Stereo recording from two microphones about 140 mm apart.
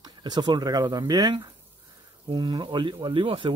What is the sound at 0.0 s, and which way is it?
Speech, 30° right (ahead or behind).